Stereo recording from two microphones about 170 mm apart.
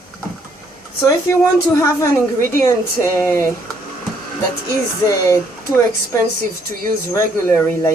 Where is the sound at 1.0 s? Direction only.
15° left (ahead or behind).